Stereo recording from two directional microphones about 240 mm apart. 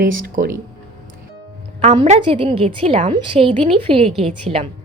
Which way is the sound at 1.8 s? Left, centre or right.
Right.